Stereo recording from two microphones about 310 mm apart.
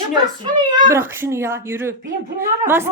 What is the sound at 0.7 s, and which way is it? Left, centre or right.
A woman's voice, centre.